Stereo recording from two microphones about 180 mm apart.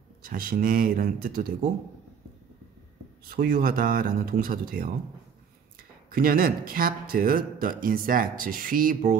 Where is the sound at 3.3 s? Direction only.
55° right (ahead or behind).